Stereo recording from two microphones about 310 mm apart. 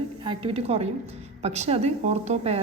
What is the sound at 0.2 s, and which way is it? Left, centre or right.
A woman's voice, centre.